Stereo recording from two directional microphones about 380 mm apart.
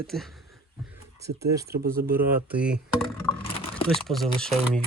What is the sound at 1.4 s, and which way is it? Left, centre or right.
Speech, centre.